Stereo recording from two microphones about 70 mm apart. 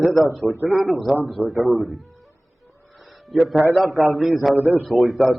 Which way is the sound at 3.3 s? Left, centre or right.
Centre.